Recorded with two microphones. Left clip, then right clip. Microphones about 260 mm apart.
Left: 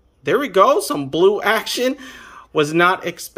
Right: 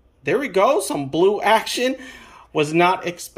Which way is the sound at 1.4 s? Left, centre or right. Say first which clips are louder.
Right 1 dB; left.